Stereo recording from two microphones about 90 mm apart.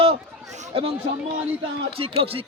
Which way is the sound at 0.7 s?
90° right.